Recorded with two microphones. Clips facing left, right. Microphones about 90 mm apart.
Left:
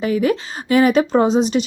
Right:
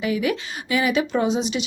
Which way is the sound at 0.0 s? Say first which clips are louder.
Left 5 dB; 40° left (ahead or behind).